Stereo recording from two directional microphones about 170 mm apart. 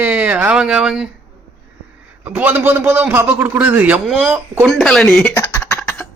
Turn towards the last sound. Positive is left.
turn(degrees=15)  # may be behind; listen again after turning